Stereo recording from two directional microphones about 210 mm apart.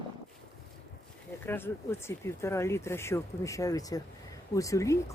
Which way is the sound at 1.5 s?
10° left (ahead or behind).